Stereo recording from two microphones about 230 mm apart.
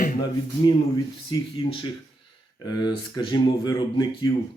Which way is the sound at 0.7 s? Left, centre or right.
Centre.